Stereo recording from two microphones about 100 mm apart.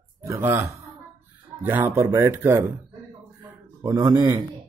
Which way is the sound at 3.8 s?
35° right (ahead or behind).